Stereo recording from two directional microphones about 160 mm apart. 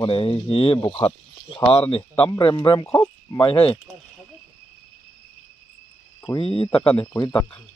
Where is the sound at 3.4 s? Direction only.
35° left (ahead or behind).